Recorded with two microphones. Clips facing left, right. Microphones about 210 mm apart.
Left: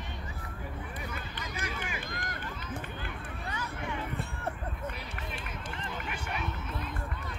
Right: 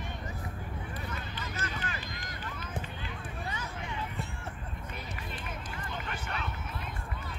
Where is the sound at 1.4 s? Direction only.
15° left (ahead or behind).